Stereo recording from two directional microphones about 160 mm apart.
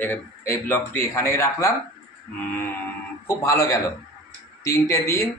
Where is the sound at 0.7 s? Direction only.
15° left (ahead or behind).